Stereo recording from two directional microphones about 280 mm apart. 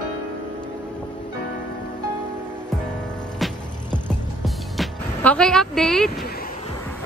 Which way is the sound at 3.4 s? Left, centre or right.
Centre.